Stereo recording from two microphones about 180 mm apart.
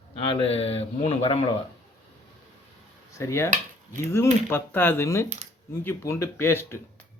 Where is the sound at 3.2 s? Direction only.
15° left (ahead or behind).